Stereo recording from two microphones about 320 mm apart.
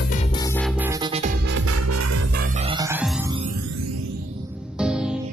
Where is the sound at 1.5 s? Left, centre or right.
Right.